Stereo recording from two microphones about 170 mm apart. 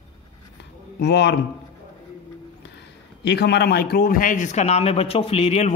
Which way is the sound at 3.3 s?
80° left.